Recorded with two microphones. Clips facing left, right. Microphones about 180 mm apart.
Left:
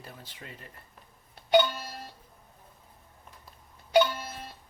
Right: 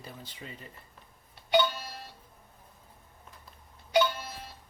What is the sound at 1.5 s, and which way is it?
Speech, 45° left (ahead or behind).